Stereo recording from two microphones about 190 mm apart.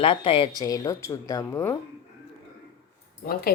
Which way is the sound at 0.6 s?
20° left (ahead or behind).